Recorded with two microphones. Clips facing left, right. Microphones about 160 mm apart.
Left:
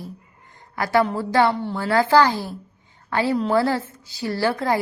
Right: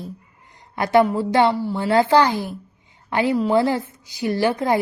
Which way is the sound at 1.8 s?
20° right (ahead or behind).